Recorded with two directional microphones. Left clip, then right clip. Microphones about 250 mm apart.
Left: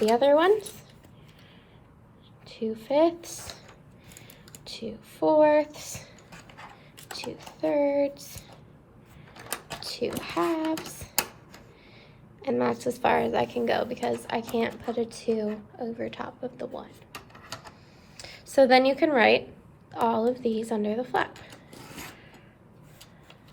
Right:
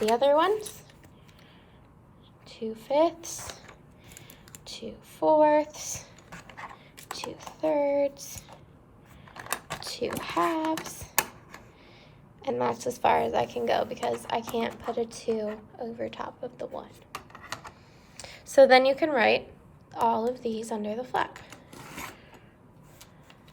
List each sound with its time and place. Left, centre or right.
0.0 s a woman's voice: centre
2.5 s a woman's voice: centre
4.6 s a woman's voice: centre
9.7 s a sound: centre
10.2 s a woman's voice: centre
12.4 s a woman's voice: centre
18.5 s a woman's voice: centre